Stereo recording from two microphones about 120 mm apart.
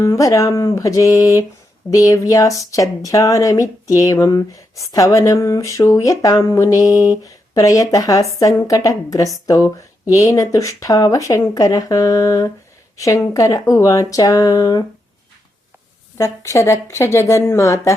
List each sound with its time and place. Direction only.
0.0 s speech: 25° left (ahead or behind)
16.1 s speech: 25° left (ahead or behind)